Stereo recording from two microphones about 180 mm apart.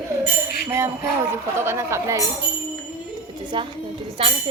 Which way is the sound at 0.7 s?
15° right (ahead or behind).